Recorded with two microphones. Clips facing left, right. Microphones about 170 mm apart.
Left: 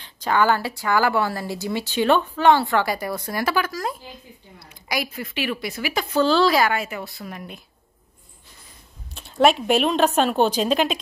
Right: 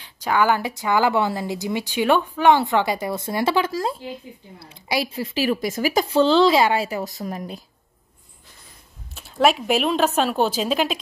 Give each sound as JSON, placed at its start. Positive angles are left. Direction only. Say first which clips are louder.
{"t": 0.0, "sound": "speech", "louder": "even", "side_deg": -10}
{"t": 6.1, "sound": "a woman's voice", "louder": "right 2 dB", "side_deg": -20}
{"t": 9.1, "sound": "a woman's voice", "louder": "left 1 dB", "side_deg": -5}